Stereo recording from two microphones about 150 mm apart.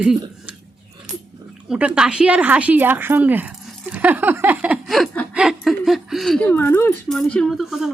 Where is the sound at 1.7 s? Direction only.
5° right (ahead or behind).